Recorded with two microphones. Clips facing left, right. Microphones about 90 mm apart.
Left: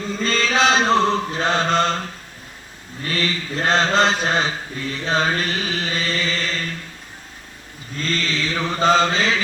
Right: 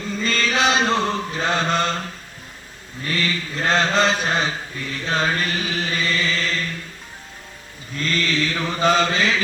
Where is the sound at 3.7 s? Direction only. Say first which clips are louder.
Left 1 dB; 25° left (ahead or behind).